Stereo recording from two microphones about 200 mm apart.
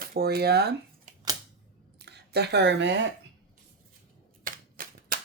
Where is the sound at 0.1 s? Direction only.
50° right (ahead or behind).